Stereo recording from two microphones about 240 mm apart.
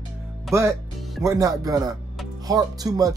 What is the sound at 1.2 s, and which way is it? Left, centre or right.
Speech, centre.